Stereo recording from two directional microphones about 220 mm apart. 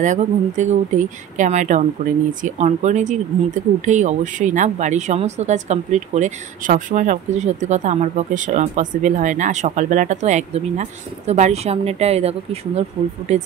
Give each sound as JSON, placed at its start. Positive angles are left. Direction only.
{"t": 0.0, "sound": "speech", "side_deg": -35}